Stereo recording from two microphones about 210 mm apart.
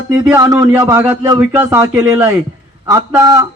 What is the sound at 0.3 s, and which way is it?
A man's voice, 15° right (ahead or behind).